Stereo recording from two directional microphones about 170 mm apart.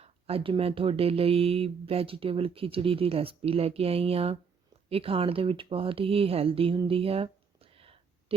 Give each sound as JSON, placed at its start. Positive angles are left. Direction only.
{"t": 0.0, "sound": "speech", "side_deg": -35}